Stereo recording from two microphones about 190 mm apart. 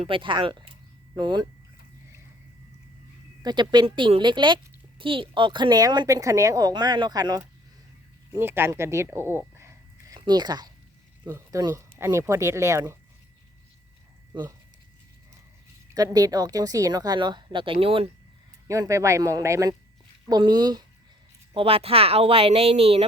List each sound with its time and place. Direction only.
0.0 s a woman's voice: 25° right (ahead or behind)
3.4 s a woman's voice: 25° right (ahead or behind)
16.0 s a woman's voice: 20° right (ahead or behind)
18.7 s a woman's voice: 15° right (ahead or behind)